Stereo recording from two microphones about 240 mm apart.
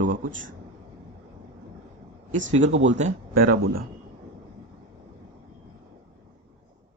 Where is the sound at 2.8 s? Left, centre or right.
Right.